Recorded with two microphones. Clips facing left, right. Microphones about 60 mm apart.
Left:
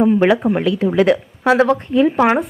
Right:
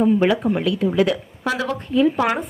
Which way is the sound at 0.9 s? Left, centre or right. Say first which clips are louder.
Left 6 dB; left.